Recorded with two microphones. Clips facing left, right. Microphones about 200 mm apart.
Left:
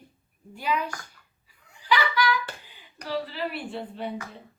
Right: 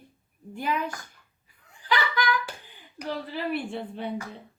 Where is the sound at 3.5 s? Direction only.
55° right (ahead or behind).